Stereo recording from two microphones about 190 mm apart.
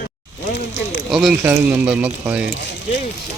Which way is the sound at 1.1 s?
5° right (ahead or behind).